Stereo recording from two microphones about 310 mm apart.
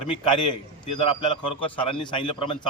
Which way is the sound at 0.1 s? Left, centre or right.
Centre.